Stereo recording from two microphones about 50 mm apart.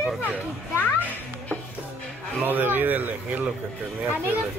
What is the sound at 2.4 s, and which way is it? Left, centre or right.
Speech, right.